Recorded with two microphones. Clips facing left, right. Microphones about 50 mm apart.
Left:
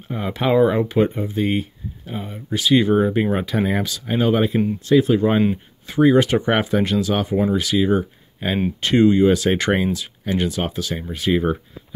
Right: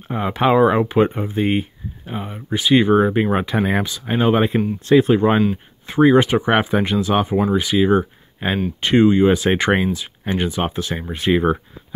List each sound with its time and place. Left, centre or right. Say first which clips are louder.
0.1 s speech: right 3 dB; right
6.2 s speech: right 2 dB; centre
7.4 s speech: right 1 dB; centre
8.4 s speech: right 2 dB; right
8.8 s speech: right 1 dB; right